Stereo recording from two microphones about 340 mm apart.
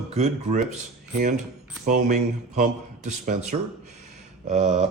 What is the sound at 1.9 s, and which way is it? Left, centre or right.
Speech, right.